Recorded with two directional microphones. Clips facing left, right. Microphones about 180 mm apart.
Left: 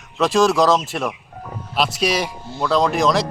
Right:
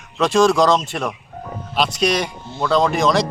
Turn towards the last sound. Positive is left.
turn(degrees=0)  # may be behind; listen again after turning